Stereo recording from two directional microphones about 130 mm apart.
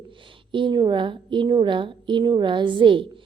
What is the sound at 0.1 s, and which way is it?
A woman's voice, 40° right (ahead or behind).